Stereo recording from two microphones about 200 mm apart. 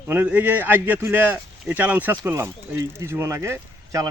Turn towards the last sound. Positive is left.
turn(degrees=-15)  # may be behind; listen again after turning